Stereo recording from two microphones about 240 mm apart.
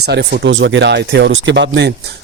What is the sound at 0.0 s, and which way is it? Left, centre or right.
Speech, right.